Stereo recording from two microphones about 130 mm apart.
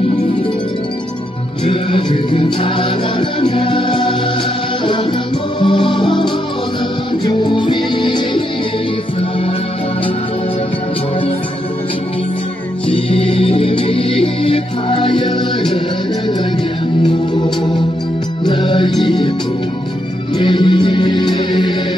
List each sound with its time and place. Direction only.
1.7 s music: 40° left (ahead or behind)
5.6 s music: 40° left (ahead or behind)
12.8 s music: 45° left (ahead or behind)
17.0 s music: 35° left (ahead or behind)
20.3 s music: 40° left (ahead or behind)